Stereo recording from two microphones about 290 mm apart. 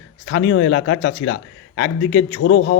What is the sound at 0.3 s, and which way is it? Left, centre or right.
Speech, left.